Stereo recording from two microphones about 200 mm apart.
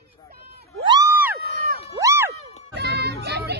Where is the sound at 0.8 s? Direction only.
20° right (ahead or behind).